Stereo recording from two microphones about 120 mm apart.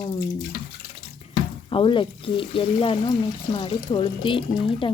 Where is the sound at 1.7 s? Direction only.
45° left (ahead or behind).